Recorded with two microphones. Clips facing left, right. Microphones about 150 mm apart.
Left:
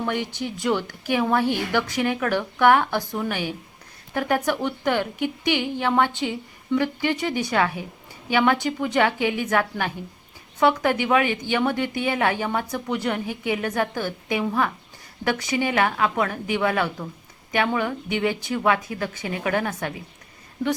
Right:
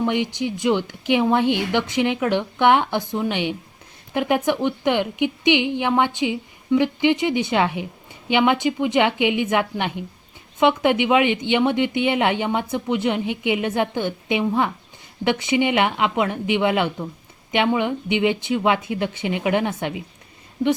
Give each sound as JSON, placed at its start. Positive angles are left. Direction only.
{"t": 0.0, "sound": "a woman's voice", "side_deg": -15}